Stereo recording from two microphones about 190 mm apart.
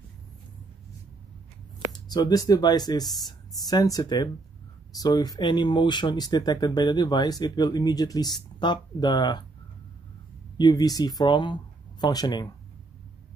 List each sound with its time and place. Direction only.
2.0 s speech: 20° left (ahead or behind)
10.6 s speech: 20° left (ahead or behind)